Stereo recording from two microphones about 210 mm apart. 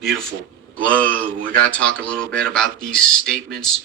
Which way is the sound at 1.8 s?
5° left (ahead or behind).